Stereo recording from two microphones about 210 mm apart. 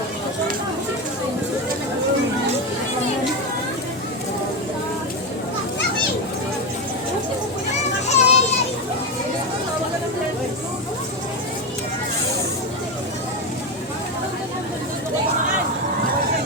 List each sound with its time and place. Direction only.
8.0 s children playing: 30° left (ahead or behind)